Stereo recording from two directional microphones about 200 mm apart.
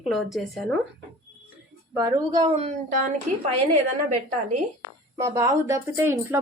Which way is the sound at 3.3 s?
45° right (ahead or behind).